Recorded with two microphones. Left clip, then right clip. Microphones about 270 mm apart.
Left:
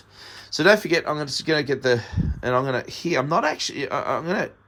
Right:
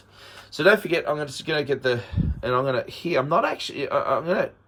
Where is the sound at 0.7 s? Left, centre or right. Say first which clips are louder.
Left 1 dB; left.